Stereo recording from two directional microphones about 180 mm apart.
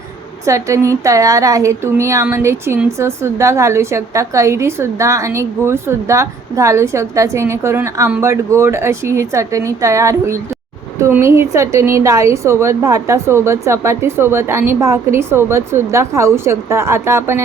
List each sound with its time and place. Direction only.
0.4 s a woman's voice: 15° right (ahead or behind)